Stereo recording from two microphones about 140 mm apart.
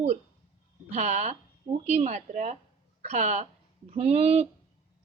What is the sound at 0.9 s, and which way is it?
A woman's voice, 55° right (ahead or behind).